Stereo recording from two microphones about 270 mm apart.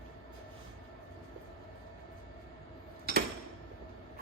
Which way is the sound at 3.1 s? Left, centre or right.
Right.